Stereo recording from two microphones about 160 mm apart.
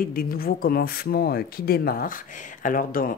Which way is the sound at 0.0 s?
65° left (ahead or behind).